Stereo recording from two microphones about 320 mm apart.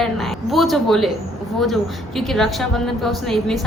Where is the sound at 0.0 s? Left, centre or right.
Centre.